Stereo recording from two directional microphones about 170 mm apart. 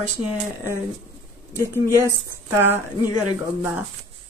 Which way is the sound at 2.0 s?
15° right (ahead or behind).